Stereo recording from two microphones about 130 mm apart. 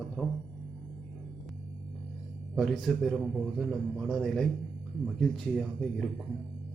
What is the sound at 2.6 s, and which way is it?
Speech, centre (ahead or behind).